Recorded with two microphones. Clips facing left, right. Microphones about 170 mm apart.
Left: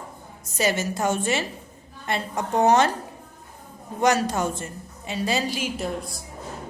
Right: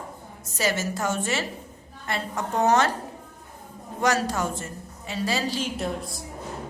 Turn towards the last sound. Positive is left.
turn(degrees=0)  # may be behind; listen again after turning